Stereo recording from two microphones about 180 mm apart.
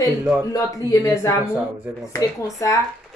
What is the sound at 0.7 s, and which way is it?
A woman's voice, 20° left (ahead or behind).